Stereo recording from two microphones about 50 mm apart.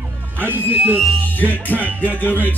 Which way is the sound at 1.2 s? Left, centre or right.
Left.